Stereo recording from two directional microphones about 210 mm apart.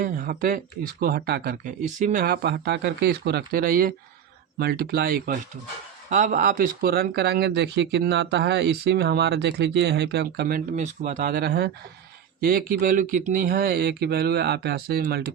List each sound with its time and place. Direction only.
0.0 s speech: 45° right (ahead or behind)